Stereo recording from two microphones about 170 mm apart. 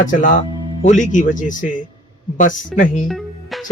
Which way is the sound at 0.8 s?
50° left (ahead or behind).